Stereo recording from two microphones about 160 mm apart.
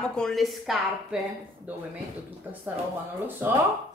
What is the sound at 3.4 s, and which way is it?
Speech, 15° right (ahead or behind).